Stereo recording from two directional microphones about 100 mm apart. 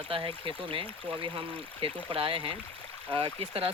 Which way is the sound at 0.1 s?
60° right (ahead or behind).